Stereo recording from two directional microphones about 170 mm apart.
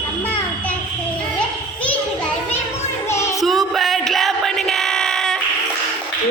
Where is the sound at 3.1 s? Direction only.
15° left (ahead or behind).